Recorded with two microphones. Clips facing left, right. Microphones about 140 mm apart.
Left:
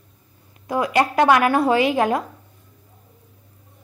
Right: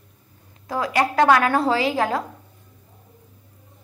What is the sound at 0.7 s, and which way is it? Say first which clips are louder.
A woman's voice: left 2 dB; 20° left (ahead or behind).